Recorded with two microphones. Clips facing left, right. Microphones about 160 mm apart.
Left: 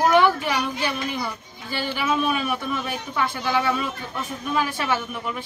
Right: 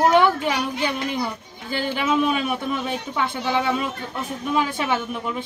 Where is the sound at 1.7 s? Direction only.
20° right (ahead or behind).